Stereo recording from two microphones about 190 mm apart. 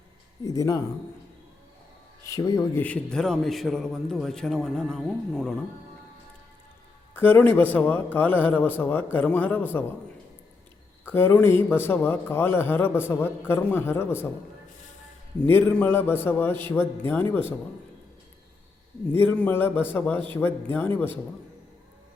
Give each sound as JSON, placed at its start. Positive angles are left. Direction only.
{"t": 0.4, "sound": "a man's voice", "side_deg": 15}
{"t": 2.2, "sound": "a man's voice", "side_deg": 15}
{"t": 2.8, "sound": "a man's voice", "side_deg": 5}
{"t": 7.1, "sound": "a man's voice", "side_deg": 10}
{"t": 11.0, "sound": "a man's voice", "side_deg": 10}
{"t": 15.4, "sound": "a man's voice", "side_deg": 10}
{"t": 19.1, "sound": "a man's voice", "side_deg": 10}